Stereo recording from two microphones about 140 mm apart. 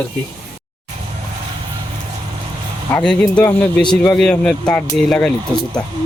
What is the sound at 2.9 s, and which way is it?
Speech, 10° left (ahead or behind).